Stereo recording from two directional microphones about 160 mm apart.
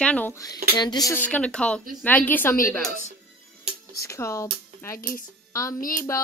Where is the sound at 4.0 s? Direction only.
20° left (ahead or behind).